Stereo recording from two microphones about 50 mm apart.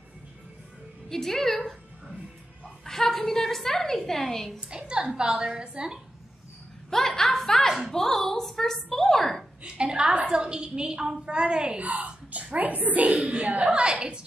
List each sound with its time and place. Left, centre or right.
1.0 s a woman's voice: centre
4.6 s a woman's voice: centre
6.9 s chuckle: centre
7.3 s a sound: centre
7.9 s a woman's voice: centre
9.6 s a woman's voice: centre
11.8 s speech: right